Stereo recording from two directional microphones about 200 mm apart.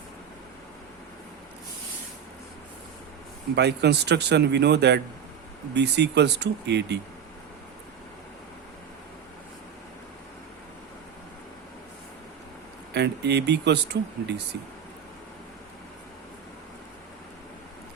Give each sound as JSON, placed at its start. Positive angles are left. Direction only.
{"t": 3.5, "sound": "speech", "side_deg": -55}
{"t": 12.9, "sound": "speech", "side_deg": -60}